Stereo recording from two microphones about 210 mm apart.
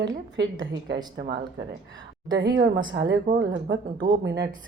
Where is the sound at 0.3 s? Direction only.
60° right (ahead or behind).